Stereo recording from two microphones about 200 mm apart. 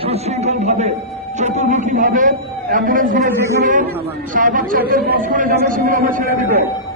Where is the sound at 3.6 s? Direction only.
40° right (ahead or behind).